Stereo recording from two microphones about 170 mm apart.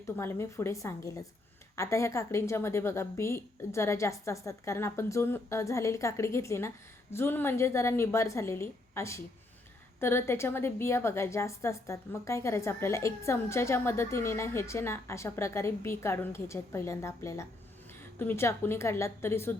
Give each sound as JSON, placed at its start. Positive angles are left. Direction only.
{"t": 0.0, "sound": "a woman's voice", "side_deg": 15}